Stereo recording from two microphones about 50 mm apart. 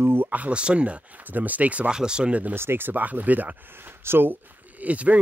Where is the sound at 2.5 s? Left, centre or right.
Right.